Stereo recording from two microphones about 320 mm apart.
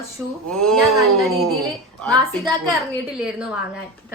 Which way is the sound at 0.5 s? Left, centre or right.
Centre.